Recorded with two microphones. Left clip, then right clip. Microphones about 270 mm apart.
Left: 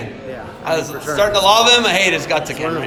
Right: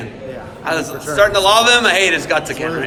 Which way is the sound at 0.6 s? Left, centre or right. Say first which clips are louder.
Even; centre.